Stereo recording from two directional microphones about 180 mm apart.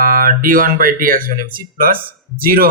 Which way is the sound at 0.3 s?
50° right (ahead or behind).